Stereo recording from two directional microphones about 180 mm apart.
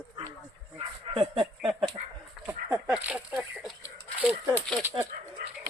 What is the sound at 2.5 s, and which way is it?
Speech, 10° right (ahead or behind).